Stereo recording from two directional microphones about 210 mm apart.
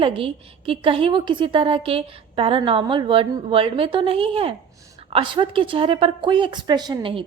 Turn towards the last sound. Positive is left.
turn(degrees=-20)  # may be behind; listen again after turning